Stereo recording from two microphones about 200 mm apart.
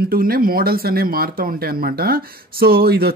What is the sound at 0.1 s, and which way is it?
Speech, 45° right (ahead or behind).